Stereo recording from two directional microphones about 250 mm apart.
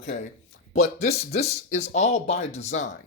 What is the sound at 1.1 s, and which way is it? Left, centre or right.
Speech, left.